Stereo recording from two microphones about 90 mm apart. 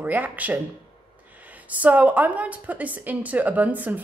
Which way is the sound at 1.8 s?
15° right (ahead or behind).